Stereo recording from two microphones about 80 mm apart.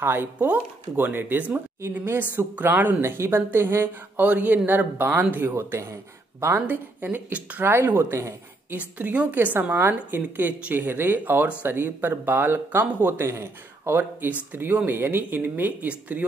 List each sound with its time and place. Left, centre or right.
0.0 s a woman's voice: right
3.0 s a woman's voice: right
8.7 s a woman's voice: centre